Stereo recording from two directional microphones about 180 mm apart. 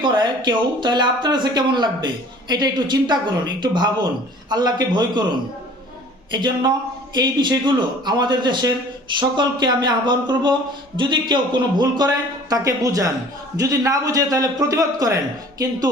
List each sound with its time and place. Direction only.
0.0 s speech: 25° right (ahead or behind)
6.3 s speech: 25° right (ahead or behind)